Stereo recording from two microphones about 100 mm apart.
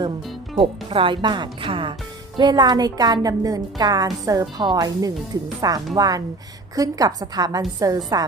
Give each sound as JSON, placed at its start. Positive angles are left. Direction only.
{"t": 0.5, "sound": "speech", "side_deg": -65}
{"t": 2.4, "sound": "a woman's voice", "side_deg": -45}